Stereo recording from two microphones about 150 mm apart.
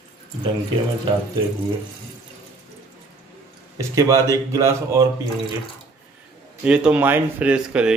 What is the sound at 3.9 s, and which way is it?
Speech, 20° right (ahead or behind).